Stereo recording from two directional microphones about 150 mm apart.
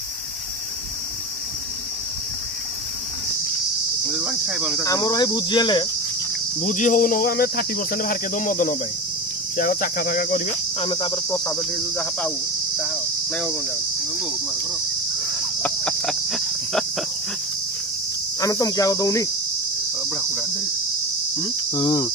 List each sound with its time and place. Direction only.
4.0 s cricket: 5° right (ahead or behind)
4.8 s cricket: 25° left (ahead or behind)
6.6 s speech: 55° left (ahead or behind)
10.8 s cricket: 35° left (ahead or behind)
11.2 s cricket: 20° left (ahead or behind)
15.6 s cricket: 5° left (ahead or behind)
18.4 s cricket: 25° left (ahead or behind)
20.0 s cricket: centre (ahead or behind)
21.4 s cricket: 30° left (ahead or behind)